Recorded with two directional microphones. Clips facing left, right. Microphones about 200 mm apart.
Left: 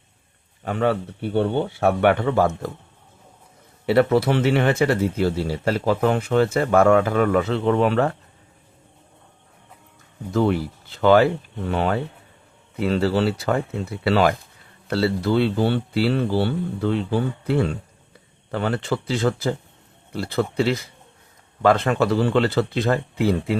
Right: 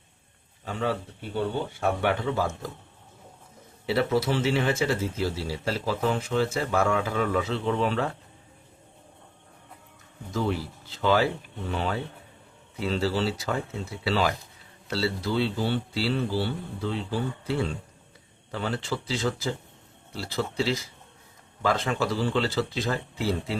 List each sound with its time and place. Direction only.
0.6 s speech: 65° left (ahead or behind)
3.8 s speech: 60° left (ahead or behind)
10.3 s speech: 60° left (ahead or behind)